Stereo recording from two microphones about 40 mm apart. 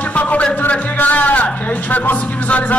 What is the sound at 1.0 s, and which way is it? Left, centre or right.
Speech, left.